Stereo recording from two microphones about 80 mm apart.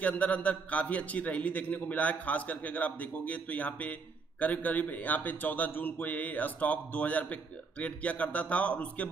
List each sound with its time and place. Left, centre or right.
0.0 s a man's voice: centre